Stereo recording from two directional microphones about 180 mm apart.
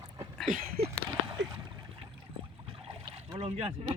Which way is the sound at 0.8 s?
60° right (ahead or behind).